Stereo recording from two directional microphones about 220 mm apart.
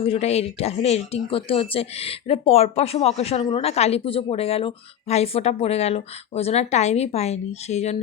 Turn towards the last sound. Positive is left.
turn(degrees=30)  # may be behind; listen again after turning